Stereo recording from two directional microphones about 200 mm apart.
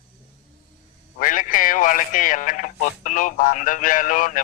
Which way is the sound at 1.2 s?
40° left (ahead or behind).